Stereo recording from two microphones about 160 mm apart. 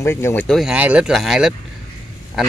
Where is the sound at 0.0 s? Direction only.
15° left (ahead or behind).